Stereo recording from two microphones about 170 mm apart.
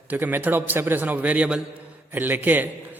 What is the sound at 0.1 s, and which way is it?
A man's voice, 10° right (ahead or behind).